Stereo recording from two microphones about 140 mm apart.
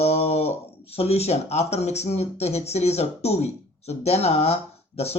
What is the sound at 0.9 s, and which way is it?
Speech, 45° left (ahead or behind).